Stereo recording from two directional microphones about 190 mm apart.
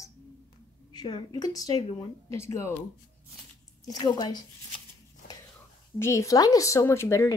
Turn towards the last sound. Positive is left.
turn(degrees=15)  # may be behind; listen again after turning